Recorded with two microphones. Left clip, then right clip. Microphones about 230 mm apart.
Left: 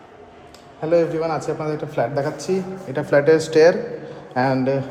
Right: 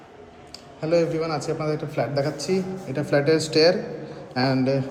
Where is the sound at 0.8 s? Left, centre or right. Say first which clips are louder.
Left 3 dB; left.